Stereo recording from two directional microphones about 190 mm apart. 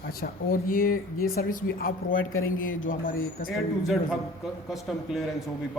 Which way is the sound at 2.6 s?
45° left (ahead or behind).